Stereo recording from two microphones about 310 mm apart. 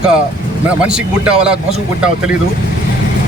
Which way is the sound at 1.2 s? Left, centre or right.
Centre.